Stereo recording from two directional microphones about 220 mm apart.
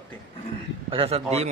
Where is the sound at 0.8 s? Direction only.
25° right (ahead or behind).